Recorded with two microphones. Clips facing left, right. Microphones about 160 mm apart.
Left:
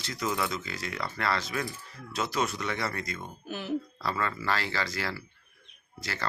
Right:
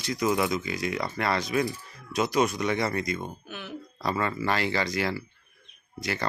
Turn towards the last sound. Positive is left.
turn(degrees=-15)  # may be behind; listen again after turning